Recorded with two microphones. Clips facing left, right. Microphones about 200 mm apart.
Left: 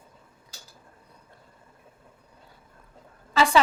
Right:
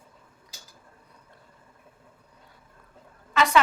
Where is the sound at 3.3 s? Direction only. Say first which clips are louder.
Left 2 dB; 30° left (ahead or behind).